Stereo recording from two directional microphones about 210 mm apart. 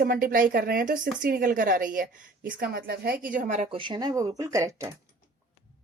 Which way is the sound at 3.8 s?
20° right (ahead or behind).